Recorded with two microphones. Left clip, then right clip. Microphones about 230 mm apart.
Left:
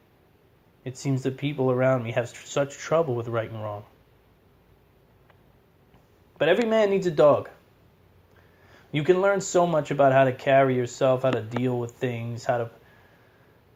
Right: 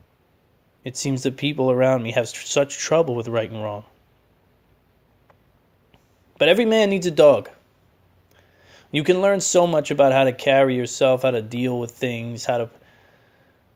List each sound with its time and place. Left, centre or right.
0.9 s speech: right
6.3 s speech: right
8.7 s speech: right